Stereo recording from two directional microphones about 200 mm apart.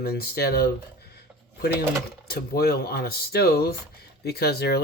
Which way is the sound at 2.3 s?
50° left (ahead or behind).